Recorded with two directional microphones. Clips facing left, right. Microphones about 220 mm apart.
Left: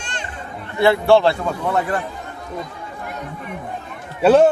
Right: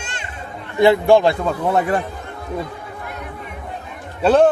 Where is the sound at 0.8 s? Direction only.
15° right (ahead or behind).